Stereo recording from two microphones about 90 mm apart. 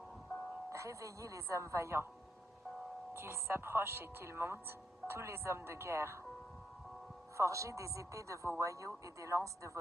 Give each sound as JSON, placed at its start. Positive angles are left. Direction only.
{"t": 0.7, "sound": "speech", "side_deg": -35}
{"t": 3.1, "sound": "speech", "side_deg": -20}
{"t": 7.3, "sound": "speech", "side_deg": -35}